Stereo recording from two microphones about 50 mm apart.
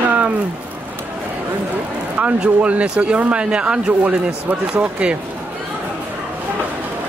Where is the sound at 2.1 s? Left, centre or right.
Right.